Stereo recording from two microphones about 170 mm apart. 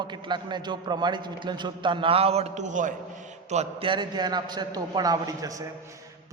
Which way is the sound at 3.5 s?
35° right (ahead or behind).